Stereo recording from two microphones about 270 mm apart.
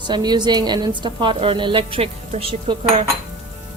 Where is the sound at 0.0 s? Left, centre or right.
Centre.